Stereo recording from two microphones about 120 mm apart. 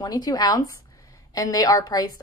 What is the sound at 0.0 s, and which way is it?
A woman's voice, 35° left (ahead or behind).